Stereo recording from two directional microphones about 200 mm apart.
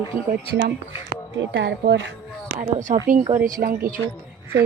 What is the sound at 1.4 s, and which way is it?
Speech, 60° right (ahead or behind).